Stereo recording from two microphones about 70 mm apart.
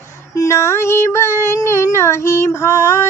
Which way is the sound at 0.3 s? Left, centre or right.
Left.